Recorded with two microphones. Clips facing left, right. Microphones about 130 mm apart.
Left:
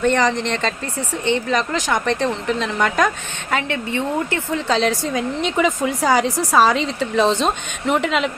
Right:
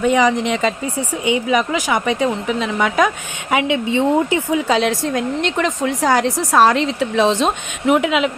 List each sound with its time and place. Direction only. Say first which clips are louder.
0.0 s speech: right 3 dB; 5° right (ahead or behind)
3.5 s speech: right 5 dB; 15° right (ahead or behind)